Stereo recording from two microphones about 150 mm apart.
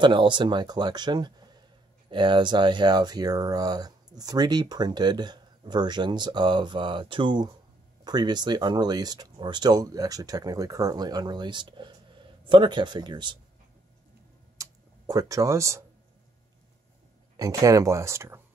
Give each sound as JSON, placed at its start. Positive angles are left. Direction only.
{"t": 0.0, "sound": "speech", "side_deg": -30}
{"t": 14.6, "sound": "a sound", "side_deg": -20}
{"t": 17.4, "sound": "speech", "side_deg": -20}